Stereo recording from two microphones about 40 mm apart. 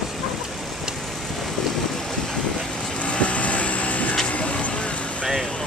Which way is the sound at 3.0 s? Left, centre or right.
Left.